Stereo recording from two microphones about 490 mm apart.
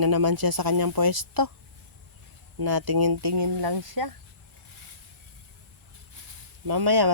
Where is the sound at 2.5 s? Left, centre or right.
Right.